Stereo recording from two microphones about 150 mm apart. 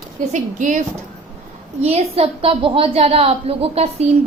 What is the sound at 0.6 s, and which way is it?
Speech, 55° right (ahead or behind).